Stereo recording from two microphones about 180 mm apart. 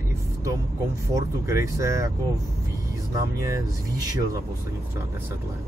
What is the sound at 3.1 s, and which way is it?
Speech, 20° right (ahead or behind).